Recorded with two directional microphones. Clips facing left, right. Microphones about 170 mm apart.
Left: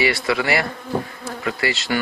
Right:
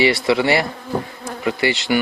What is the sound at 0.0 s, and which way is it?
Speech, 25° right (ahead or behind).